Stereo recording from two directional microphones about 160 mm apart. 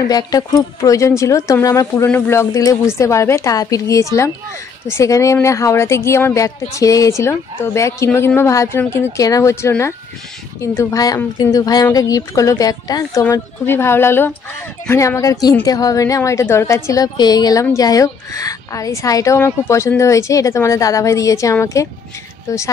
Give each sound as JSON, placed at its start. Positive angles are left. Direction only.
{"t": 0.1, "sound": "a woman's voice", "side_deg": 20}